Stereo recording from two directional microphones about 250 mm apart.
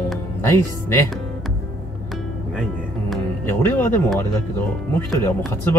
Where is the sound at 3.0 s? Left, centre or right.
Centre.